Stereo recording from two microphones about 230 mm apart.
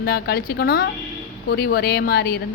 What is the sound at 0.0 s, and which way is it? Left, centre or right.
A woman's voice, left.